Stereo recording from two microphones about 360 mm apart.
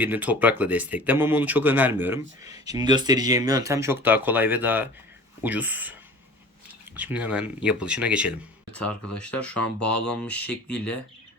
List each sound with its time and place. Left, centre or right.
0.0 s speech: centre
8.8 s speech: left
9.4 s speech: centre